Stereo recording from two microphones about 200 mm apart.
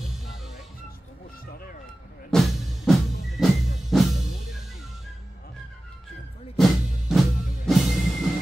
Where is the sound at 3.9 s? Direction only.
Centre (ahead or behind).